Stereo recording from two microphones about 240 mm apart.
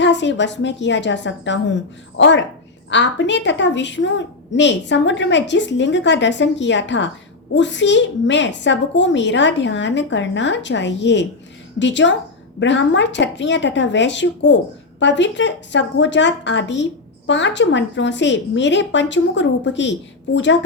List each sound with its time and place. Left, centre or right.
0.0 s a woman's voice: left